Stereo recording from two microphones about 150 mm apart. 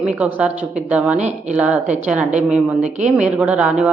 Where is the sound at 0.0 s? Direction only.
10° right (ahead or behind).